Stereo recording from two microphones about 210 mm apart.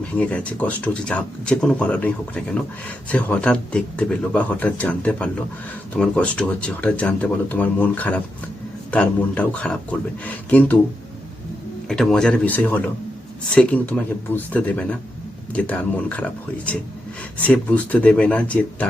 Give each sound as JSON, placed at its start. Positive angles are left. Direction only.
{"t": 0.0, "sound": "speech", "side_deg": 5}
{"t": 11.9, "sound": "speech", "side_deg": 5}